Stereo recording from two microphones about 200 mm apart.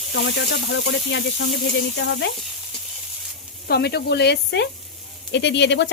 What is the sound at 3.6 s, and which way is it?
A woman's voice, 55° left (ahead or behind).